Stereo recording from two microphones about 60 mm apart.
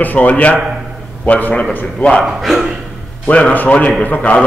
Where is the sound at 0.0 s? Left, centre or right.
Left.